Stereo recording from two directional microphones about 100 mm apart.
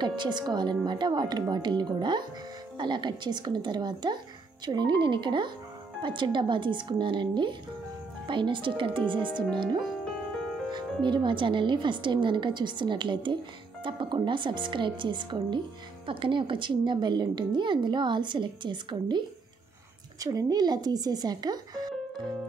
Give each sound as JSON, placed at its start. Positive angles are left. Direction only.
{"t": 0.0, "sound": "a woman's voice", "side_deg": -50}
{"t": 10.7, "sound": "a woman's voice", "side_deg": -50}
{"t": 20.2, "sound": "speech", "side_deg": -35}